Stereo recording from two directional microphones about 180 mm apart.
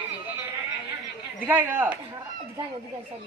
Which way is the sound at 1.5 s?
10° right (ahead or behind).